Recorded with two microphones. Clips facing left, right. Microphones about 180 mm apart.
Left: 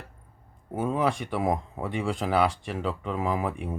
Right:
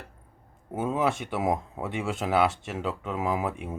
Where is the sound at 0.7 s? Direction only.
5° right (ahead or behind).